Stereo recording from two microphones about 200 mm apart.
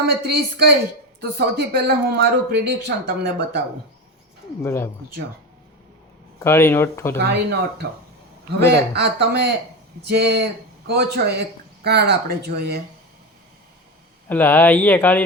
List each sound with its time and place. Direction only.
0.3 s speech: 50° right (ahead or behind)
4.6 s speech: 10° left (ahead or behind)
6.4 s speech: 15° left (ahead or behind)
7.2 s speech: 55° right (ahead or behind)
9.0 s speech: 55° right (ahead or behind)
14.3 s speech: 10° left (ahead or behind)